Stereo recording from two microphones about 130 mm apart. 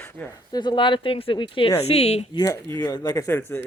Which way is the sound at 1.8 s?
55° left (ahead or behind).